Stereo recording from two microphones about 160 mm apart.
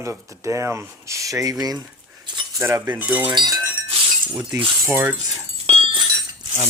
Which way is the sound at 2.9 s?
10° right (ahead or behind).